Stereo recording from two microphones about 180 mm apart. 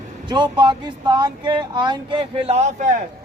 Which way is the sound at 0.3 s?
25° right (ahead or behind).